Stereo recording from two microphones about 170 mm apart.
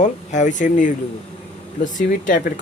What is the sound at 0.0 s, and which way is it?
A man's voice, 45° left (ahead or behind).